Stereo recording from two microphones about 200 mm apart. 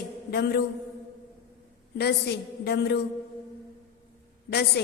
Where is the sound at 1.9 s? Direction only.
55° left (ahead or behind).